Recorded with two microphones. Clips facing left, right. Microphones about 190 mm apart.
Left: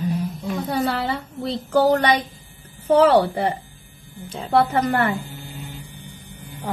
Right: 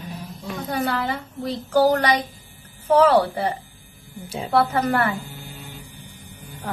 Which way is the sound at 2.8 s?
30° left (ahead or behind).